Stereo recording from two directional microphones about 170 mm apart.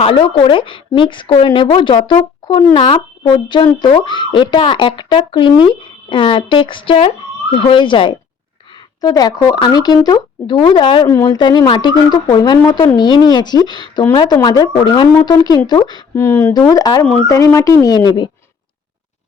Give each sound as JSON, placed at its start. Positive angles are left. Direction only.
{"t": 0.0, "sound": "a woman's voice", "side_deg": 35}
{"t": 16.1, "sound": "speech", "side_deg": 15}